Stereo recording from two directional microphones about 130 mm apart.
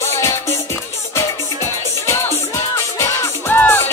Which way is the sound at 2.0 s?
20° left (ahead or behind).